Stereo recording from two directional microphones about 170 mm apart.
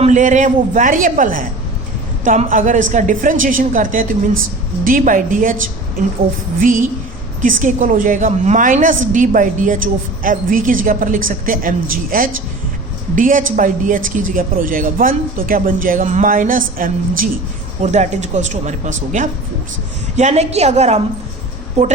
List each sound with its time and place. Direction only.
0.0 s a woman's voice: 45° right (ahead or behind)
17.8 s a woman's voice: 40° right (ahead or behind)